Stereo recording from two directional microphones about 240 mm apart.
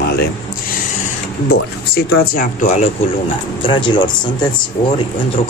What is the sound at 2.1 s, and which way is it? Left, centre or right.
Speech, left.